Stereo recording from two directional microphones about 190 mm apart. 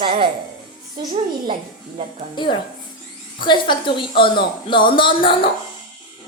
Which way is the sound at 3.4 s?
25° left (ahead or behind).